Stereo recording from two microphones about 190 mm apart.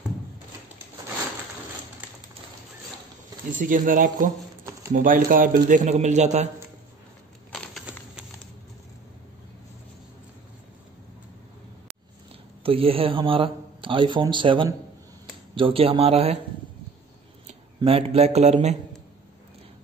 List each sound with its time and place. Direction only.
3.5 s speech: 45° right (ahead or behind)
7.5 s a sound: centre (ahead or behind)
12.6 s speech: 30° right (ahead or behind)
17.7 s speech: 30° right (ahead or behind)